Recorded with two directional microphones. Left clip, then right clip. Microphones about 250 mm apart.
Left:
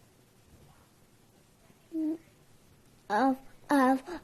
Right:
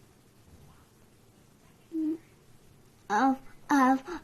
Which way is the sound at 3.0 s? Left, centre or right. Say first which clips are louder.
Right 1 dB; centre.